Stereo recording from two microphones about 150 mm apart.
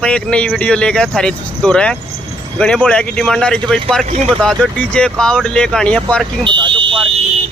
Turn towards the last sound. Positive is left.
turn(degrees=-35)  # may be behind; listen again after turning